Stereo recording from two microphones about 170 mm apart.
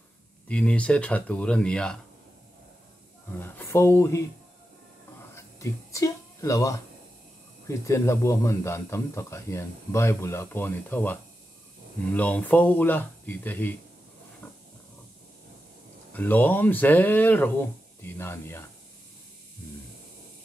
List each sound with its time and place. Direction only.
0.5 s speech: 5° left (ahead or behind)
3.3 s speech: 10° left (ahead or behind)
5.3 s a sound: 15° left (ahead or behind)
7.6 s speech: 15° left (ahead or behind)
14.4 s hiss: 10° left (ahead or behind)
16.1 s speech: 10° left (ahead or behind)